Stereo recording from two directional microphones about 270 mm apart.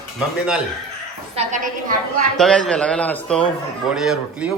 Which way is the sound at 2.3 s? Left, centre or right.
Centre.